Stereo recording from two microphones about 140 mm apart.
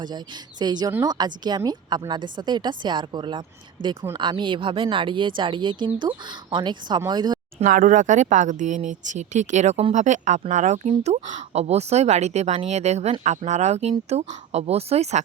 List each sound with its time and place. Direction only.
0.0 s a woman's voice: 30° right (ahead or behind)
7.6 s speech: 70° right (ahead or behind); by 15.2 s 50° right (ahead or behind)